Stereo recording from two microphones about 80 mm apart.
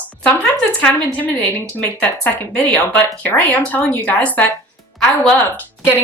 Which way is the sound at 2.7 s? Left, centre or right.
Left.